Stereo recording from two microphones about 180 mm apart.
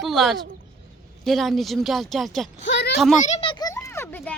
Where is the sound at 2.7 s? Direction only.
65° left (ahead or behind).